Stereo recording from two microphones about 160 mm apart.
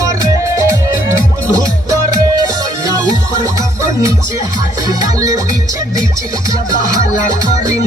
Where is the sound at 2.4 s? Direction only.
20° right (ahead or behind).